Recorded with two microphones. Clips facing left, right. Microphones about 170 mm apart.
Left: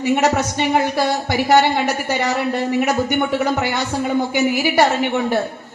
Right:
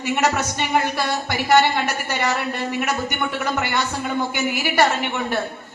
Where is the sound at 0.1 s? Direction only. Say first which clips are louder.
Left 4 dB; 40° left (ahead or behind).